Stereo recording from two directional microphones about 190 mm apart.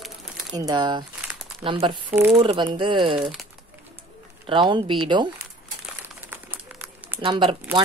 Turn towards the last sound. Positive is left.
turn(degrees=-25)  # may be behind; listen again after turning